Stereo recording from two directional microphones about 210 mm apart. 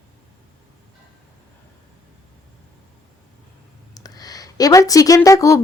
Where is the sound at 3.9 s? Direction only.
20° left (ahead or behind).